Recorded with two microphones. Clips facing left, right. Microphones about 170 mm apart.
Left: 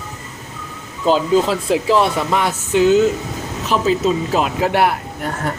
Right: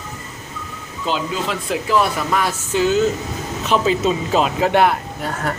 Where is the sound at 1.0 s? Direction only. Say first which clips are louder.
Left 8 dB; 35° left (ahead or behind); by 3.0 s 20° left (ahead or behind).